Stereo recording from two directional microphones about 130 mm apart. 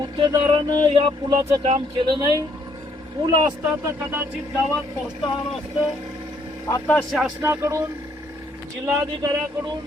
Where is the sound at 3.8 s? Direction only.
15° right (ahead or behind).